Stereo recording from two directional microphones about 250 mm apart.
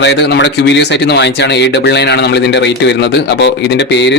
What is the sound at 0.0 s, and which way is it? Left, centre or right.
A man's voice, left.